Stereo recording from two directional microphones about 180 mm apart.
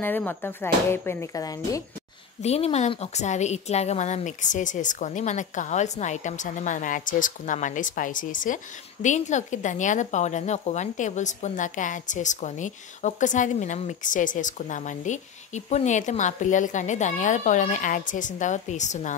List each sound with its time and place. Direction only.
0.0 s speech: 10° left (ahead or behind)
2.4 s a woman's voice: 35° left (ahead or behind)